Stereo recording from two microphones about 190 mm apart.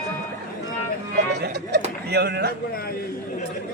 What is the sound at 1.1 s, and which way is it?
Music, 60° right (ahead or behind).